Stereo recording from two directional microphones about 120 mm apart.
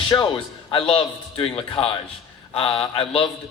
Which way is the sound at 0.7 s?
50° left (ahead or behind).